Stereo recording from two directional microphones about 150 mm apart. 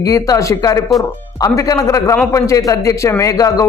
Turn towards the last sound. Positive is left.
turn(degrees=25)  # may be behind; listen again after turning